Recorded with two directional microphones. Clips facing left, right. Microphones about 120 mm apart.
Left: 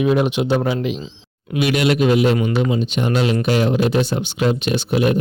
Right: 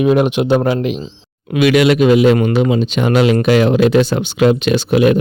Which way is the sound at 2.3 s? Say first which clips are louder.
Right 5 dB; 75° right (ahead or behind).